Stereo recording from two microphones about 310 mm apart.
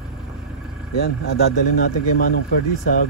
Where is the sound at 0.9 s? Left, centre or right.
Left.